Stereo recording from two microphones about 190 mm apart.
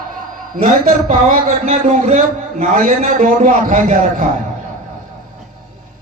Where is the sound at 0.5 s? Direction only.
40° right (ahead or behind).